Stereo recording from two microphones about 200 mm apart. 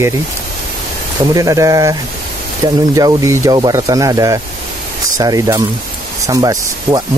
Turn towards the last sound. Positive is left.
turn(degrees=-20)  # may be behind; listen again after turning